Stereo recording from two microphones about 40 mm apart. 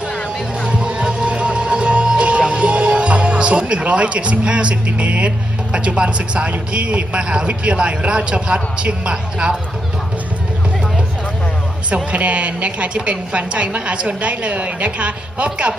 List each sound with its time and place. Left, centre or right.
0.7 s music: right
2.0 s a man's voice: right
11.9 s a woman's voice: right